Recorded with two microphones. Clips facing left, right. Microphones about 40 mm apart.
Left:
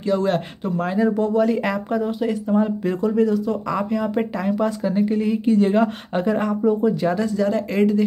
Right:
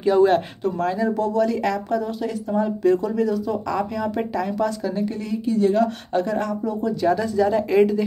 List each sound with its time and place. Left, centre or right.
0.0 s speech: centre
0.7 s speech: centre
5.5 s speech: left
6.2 s speech: centre
6.5 s speech: left
7.1 s speech: centre